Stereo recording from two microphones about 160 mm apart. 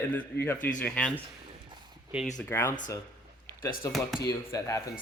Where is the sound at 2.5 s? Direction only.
15° left (ahead or behind).